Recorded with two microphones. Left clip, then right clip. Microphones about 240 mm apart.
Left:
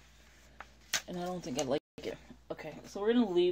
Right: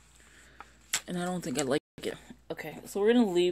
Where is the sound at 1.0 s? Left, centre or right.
Right.